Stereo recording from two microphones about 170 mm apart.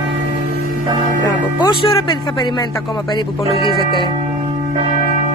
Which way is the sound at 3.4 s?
30° left (ahead or behind).